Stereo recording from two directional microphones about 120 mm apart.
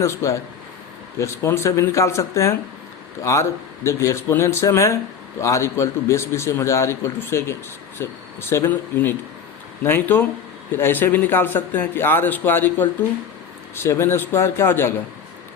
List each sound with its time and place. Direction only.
0.0 s a man's voice: 25° left (ahead or behind)
3.8 s a man's voice: 25° left (ahead or behind)